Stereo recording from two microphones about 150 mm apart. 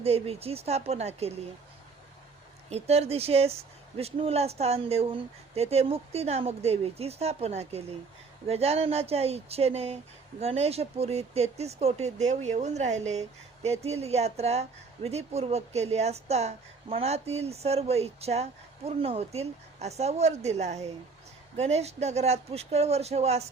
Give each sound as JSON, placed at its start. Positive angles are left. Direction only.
{"t": 0.0, "sound": "speech", "side_deg": -40}
{"t": 2.6, "sound": "speech", "side_deg": -45}